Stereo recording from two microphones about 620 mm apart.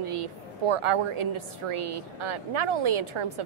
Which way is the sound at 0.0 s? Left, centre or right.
Right.